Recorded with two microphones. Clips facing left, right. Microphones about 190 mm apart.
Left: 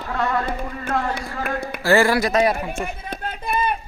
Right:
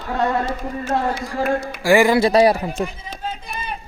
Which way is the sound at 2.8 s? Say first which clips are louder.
Even; 60° left (ahead or behind).